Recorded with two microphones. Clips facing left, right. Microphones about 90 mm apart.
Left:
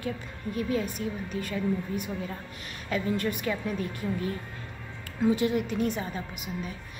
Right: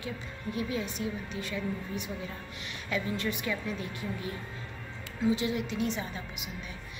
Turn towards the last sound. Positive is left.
turn(degrees=45)  # may be behind; listen again after turning